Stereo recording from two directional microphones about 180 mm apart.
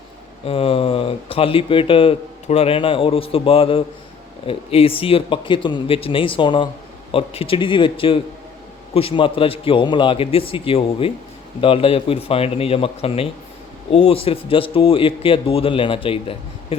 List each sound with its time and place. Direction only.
0.4 s a man's voice: 30° left (ahead or behind)